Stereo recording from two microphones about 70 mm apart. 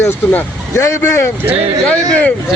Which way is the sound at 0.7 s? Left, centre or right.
Left.